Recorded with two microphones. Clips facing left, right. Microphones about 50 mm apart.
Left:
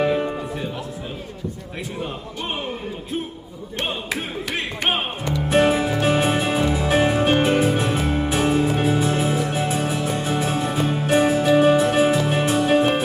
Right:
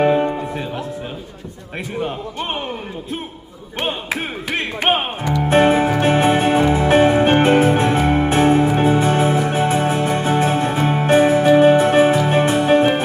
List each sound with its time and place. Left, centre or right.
0.0 s music: right
2.0 s a man's voice: right
5.4 s music: right